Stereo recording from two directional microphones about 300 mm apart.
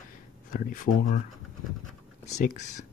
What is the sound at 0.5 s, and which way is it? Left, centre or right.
Speech, left.